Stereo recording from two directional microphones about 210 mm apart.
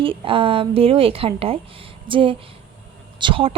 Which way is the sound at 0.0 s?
25° right (ahead or behind).